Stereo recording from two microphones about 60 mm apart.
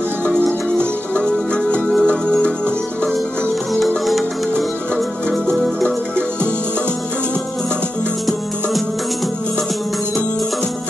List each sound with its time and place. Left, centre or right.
0.3 s music: centre
3.7 s music: centre